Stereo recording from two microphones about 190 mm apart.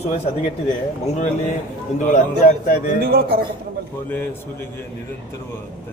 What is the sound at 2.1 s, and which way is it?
Speech, 40° left (ahead or behind).